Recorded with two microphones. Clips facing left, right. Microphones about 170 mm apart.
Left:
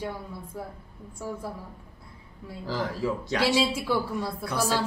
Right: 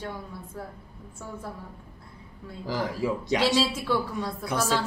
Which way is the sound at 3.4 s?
10° left (ahead or behind).